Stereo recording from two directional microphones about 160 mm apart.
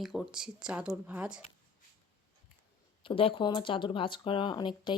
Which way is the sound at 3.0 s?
35° left (ahead or behind).